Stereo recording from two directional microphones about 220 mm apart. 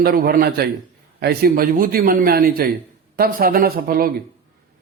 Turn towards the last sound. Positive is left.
turn(degrees=-40)  # may be behind; listen again after turning